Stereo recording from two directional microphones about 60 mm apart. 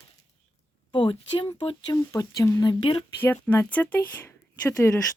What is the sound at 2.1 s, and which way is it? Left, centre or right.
Speech, left.